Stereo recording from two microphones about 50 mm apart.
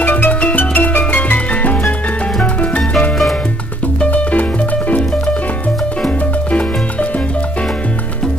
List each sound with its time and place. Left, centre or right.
0.0 s music: left
4.1 s music: left